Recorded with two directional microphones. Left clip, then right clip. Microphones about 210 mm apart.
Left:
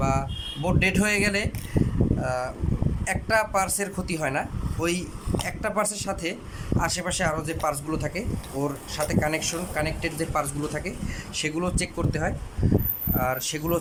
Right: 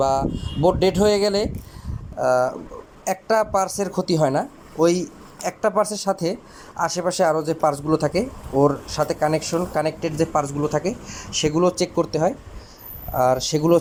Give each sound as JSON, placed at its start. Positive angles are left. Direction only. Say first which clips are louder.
{"t": 0.0, "sound": "speech", "louder": "right 7 dB", "side_deg": -20}